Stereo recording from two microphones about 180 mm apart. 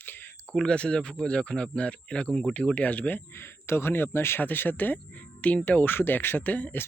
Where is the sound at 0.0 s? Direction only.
10° left (ahead or behind).